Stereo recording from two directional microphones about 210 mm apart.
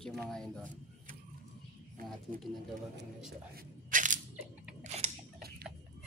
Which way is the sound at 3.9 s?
40° right (ahead or behind).